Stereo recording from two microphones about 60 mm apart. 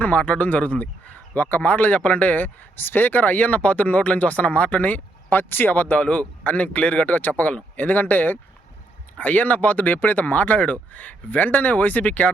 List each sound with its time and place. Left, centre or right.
0.0 s speech: left